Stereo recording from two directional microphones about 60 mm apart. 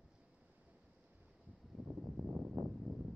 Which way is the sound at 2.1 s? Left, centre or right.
Right.